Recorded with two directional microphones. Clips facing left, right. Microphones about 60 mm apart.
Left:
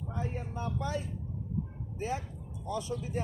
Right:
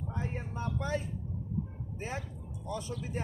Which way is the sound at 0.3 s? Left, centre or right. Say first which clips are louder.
Left 1 dB; right.